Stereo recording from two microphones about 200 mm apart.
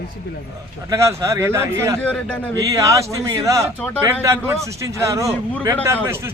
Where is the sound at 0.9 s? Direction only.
15° right (ahead or behind).